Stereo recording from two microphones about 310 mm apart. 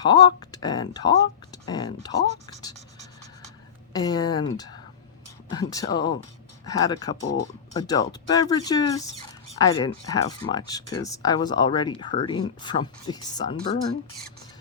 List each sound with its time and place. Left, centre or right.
0.0 s speech: centre
3.9 s speech: centre
6.0 s speech: left
6.7 s speech: centre
7.2 s speech: left
7.8 s speech: centre